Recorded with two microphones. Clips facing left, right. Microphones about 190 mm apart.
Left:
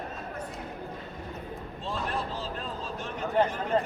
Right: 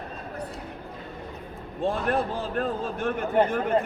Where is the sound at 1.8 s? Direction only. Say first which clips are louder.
Right 8 dB; 55° right (ahead or behind).